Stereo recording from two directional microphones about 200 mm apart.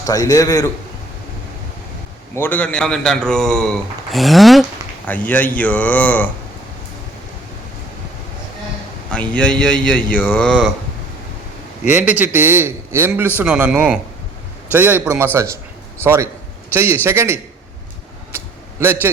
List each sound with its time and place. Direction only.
0.0 s a man's voice: 15° left (ahead or behind)
2.3 s a man's voice: 10° left (ahead or behind)
9.3 s speech: 5° left (ahead or behind)
11.9 s a man's voice: 5° right (ahead or behind)
18.3 s a sound: 10° right (ahead or behind)